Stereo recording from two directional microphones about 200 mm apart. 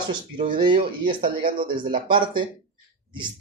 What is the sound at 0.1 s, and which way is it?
Speech, 25° right (ahead or behind).